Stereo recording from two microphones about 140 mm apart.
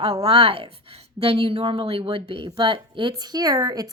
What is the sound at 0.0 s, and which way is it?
Speech, 45° right (ahead or behind).